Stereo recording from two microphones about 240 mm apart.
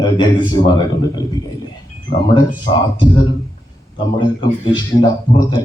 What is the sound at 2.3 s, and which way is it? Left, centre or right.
Speech, centre.